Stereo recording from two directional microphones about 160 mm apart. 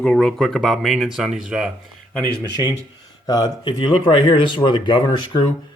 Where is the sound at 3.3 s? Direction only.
25° left (ahead or behind).